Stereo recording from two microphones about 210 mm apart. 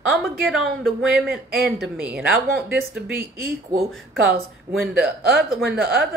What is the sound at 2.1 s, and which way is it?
Speech, 50° right (ahead or behind).